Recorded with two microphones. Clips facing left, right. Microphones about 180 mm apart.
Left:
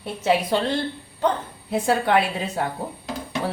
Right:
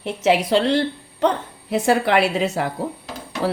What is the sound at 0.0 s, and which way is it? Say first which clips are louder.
A woman's voice: right 3 dB; 85° right.